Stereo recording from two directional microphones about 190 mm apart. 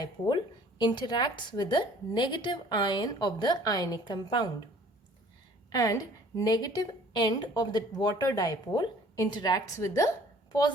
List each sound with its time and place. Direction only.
0.8 s a woman's voice: 25° left (ahead or behind)
5.7 s a woman's voice: 20° left (ahead or behind)